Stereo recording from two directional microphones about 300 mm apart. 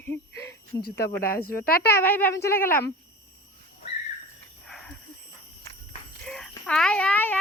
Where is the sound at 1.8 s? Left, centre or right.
Centre.